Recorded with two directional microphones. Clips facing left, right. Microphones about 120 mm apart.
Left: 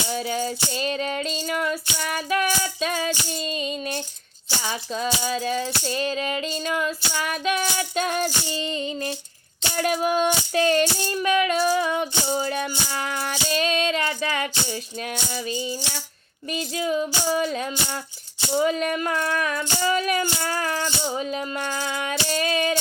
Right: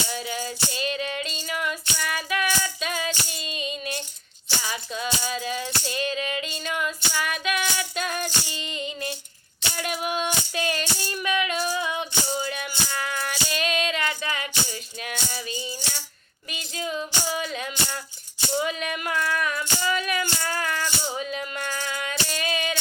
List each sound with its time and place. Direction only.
0.1 s music: 35° left (ahead or behind)
17.2 s music: 40° left (ahead or behind)